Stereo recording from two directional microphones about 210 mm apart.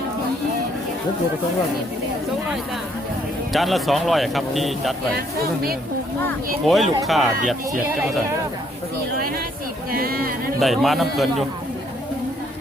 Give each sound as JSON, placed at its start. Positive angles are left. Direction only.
{"t": 3.5, "sound": "speech", "side_deg": 0}
{"t": 6.2, "sound": "speech", "side_deg": 0}
{"t": 9.9, "sound": "speech", "side_deg": -45}
{"t": 10.6, "sound": "speech", "side_deg": 0}